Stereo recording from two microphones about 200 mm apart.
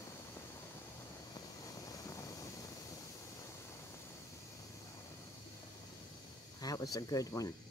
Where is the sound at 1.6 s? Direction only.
15° left (ahead or behind).